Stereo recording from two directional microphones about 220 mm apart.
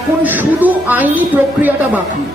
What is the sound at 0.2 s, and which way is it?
A man's voice, 10° right (ahead or behind).